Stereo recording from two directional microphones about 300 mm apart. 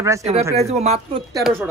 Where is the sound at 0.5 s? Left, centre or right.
Right.